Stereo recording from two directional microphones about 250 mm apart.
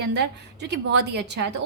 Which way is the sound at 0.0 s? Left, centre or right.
Right.